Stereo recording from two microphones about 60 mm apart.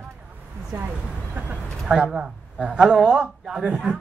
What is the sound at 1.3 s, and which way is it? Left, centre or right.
A man's voice, centre.